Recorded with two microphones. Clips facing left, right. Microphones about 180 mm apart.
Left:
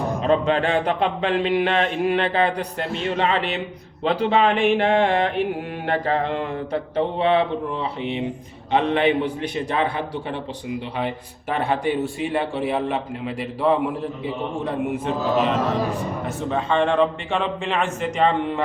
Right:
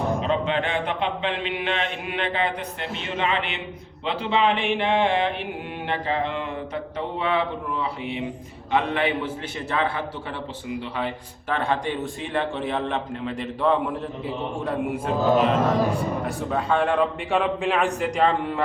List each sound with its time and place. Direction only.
0.3 s a man's voice: 45° left (ahead or behind)
6.9 s speech: 30° left (ahead or behind)
11.5 s a man's voice: 10° left (ahead or behind)